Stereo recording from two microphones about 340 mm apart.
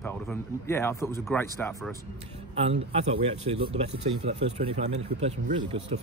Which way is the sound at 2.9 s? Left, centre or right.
Centre.